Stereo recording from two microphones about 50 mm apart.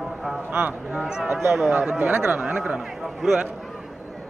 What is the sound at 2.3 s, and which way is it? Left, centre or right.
Speech, centre.